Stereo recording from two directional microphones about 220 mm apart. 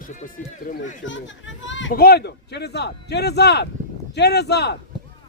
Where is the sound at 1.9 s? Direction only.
45° left (ahead or behind).